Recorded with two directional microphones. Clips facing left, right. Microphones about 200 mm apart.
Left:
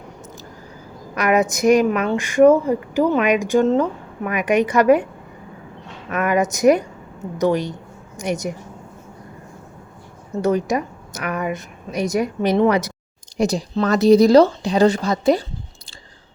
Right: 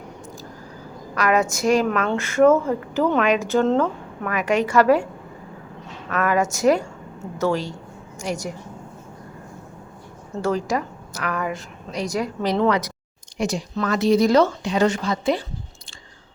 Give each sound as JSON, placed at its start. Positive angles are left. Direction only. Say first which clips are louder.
{"t": 1.1, "sound": "a woman's voice", "louder": "left 2 dB", "side_deg": 20}
{"t": 6.1, "sound": "a woman's voice", "louder": "left 2 dB", "side_deg": 20}
{"t": 10.4, "sound": "a woman's voice", "louder": "left 4 dB", "side_deg": 20}
{"t": 13.3, "sound": "speech", "louder": "left 5 dB", "side_deg": 35}